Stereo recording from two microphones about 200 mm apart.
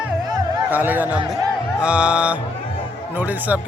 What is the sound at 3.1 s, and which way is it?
Speech, 10° right (ahead or behind).